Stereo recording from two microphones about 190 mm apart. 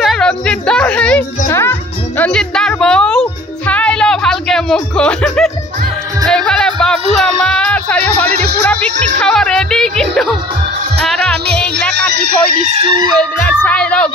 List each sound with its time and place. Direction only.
0.0 s music: centre (ahead or behind)
9.2 s speech: 5° left (ahead or behind)
12.6 s chicken: 25° right (ahead or behind)
13.2 s speech: 5° left (ahead or behind)